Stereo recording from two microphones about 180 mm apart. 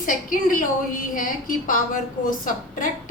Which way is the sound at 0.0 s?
50° left (ahead or behind).